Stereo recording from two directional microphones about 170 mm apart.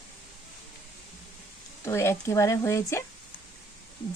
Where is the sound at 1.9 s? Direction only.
15° left (ahead or behind).